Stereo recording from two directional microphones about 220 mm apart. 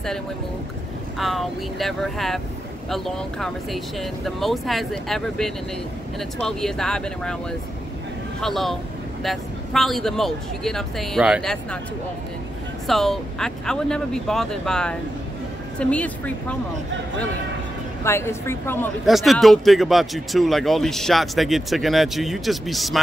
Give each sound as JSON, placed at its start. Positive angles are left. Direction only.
{"t": 1.1, "sound": "speech", "side_deg": 0}
{"t": 8.4, "sound": "speech", "side_deg": 0}
{"t": 12.8, "sound": "speech", "side_deg": 0}
{"t": 18.0, "sound": "a woman's voice", "side_deg": 10}
{"t": 19.0, "sound": "speech", "side_deg": 0}